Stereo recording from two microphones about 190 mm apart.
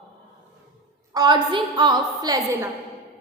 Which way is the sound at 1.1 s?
20° right (ahead or behind).